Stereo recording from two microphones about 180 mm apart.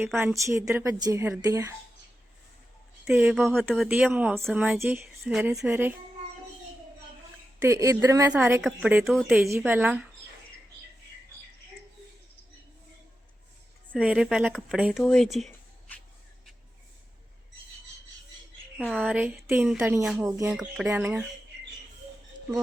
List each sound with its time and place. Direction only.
0.2 s speech: 15° right (ahead or behind)
3.0 s speech: 10° right (ahead or behind)
3.3 s speech: centre (ahead or behind)
7.6 s speech: 15° right (ahead or behind)
13.9 s speech: 5° right (ahead or behind)
15.0 s a sound: 5° left (ahead or behind)
18.9 s speech: 10° right (ahead or behind)